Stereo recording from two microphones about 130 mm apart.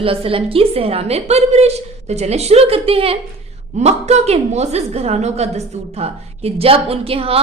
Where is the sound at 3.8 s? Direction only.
60° right (ahead or behind).